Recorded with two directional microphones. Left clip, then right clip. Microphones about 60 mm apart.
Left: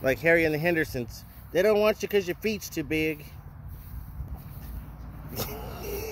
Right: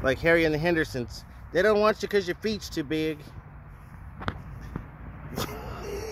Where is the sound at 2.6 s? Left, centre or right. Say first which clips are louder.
Left 1 dB; centre.